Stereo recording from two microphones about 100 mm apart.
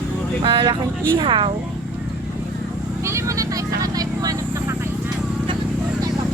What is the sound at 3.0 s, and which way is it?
Vehicle, 30° right (ahead or behind).